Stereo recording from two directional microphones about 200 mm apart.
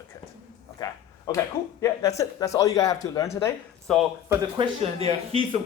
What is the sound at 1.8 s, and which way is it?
Speech, 15° left (ahead or behind).